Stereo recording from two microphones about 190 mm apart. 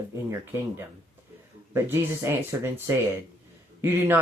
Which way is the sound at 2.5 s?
15° right (ahead or behind).